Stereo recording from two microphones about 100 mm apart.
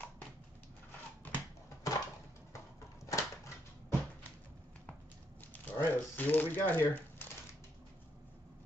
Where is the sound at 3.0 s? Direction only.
30° left (ahead or behind).